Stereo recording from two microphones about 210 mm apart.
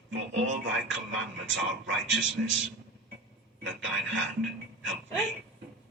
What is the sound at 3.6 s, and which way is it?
Speech, 65° right (ahead or behind).